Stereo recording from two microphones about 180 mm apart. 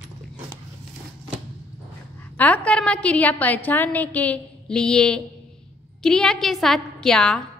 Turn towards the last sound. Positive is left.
turn(degrees=5)  # may be behind; listen again after turning